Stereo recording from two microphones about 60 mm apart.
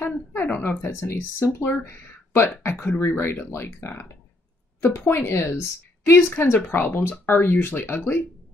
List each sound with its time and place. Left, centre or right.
0.3 s speech: left